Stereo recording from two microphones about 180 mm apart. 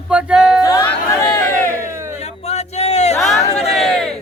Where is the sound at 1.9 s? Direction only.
15° right (ahead or behind).